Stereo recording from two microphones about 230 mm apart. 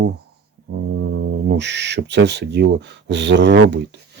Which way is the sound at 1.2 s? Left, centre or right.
Right.